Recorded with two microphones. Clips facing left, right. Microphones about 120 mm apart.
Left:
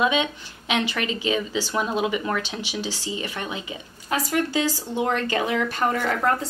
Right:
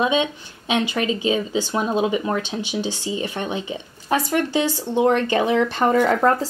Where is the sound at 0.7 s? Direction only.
25° right (ahead or behind).